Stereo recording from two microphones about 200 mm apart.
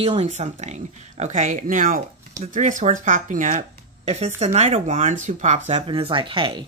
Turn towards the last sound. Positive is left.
turn(degrees=-25)  # may be behind; listen again after turning